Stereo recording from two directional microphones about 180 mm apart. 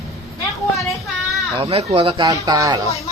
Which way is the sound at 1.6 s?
30° right (ahead or behind).